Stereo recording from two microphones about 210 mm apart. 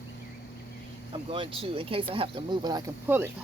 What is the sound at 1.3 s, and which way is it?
Speech, 25° right (ahead or behind).